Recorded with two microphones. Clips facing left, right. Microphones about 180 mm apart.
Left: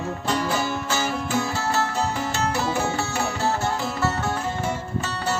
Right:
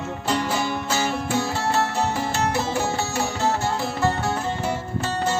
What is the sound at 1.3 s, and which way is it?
Music, 30° right (ahead or behind).